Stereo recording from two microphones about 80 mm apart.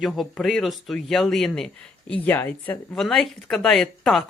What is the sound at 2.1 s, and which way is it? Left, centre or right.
Speech, left.